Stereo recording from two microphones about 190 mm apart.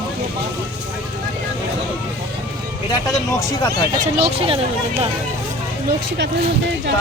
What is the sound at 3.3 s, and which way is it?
Speech, 20° left (ahead or behind).